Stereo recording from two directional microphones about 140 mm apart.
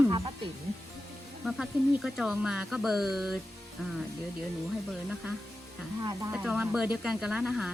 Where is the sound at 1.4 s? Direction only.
Centre (ahead or behind).